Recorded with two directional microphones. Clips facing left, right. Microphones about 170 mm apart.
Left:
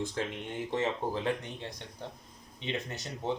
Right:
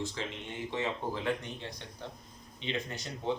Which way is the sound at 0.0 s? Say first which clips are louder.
Left 3 dB; 55° left (ahead or behind).